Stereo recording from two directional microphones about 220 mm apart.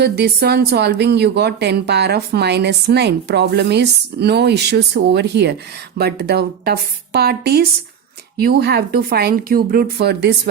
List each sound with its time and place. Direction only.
0.0 s a woman's voice: 50° right (ahead or behind)